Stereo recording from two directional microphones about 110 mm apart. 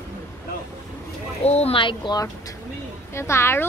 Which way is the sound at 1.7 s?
50° left (ahead or behind).